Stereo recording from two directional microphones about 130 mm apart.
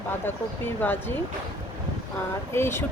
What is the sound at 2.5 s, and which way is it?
Speech, 20° left (ahead or behind).